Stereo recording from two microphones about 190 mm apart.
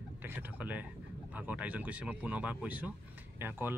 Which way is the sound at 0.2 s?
10° right (ahead or behind).